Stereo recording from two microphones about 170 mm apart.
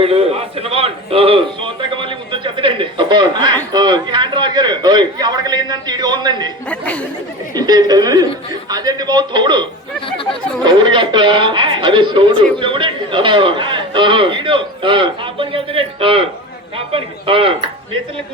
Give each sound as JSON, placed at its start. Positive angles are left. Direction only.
{"t": 0.0, "sound": "a man's voice", "side_deg": -35}
{"t": 6.7, "sound": "speech", "side_deg": 10}
{"t": 7.5, "sound": "a man's voice", "side_deg": -25}